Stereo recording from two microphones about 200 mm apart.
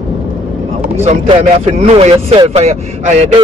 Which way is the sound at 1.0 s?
30° right (ahead or behind).